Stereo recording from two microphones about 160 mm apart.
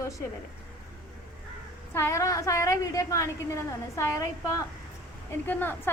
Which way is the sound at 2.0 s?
20° left (ahead or behind).